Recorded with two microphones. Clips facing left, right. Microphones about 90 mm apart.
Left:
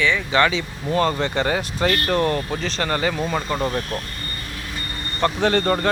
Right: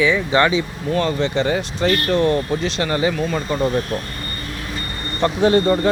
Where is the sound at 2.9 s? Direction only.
15° right (ahead or behind).